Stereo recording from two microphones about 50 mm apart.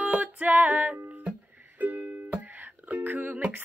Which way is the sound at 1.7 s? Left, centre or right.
Right.